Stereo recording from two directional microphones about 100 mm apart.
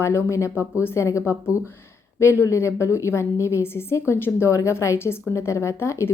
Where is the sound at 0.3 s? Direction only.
30° left (ahead or behind).